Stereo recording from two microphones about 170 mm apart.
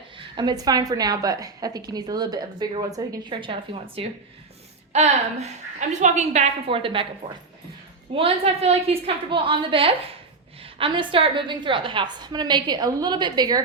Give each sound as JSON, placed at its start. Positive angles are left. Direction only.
{"t": 0.2, "sound": "a woman's voice", "side_deg": -25}
{"t": 8.1, "sound": "a woman's voice", "side_deg": -35}